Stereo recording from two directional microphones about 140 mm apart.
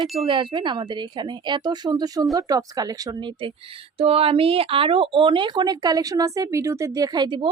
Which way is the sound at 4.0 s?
45° right (ahead or behind).